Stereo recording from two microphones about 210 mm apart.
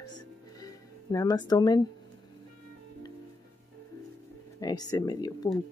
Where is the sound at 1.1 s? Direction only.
20° left (ahead or behind).